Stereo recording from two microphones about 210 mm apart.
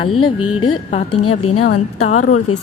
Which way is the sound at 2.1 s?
35° left (ahead or behind).